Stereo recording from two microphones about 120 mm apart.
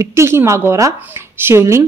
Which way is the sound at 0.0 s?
20° right (ahead or behind).